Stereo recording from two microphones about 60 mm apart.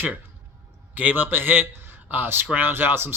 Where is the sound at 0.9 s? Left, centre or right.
Right.